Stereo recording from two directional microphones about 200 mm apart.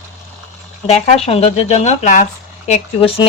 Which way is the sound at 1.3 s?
30° left (ahead or behind).